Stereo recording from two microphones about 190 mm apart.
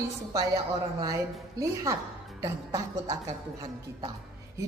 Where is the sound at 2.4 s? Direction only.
15° right (ahead or behind).